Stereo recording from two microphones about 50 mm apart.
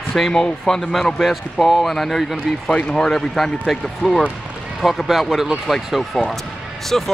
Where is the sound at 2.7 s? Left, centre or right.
Centre.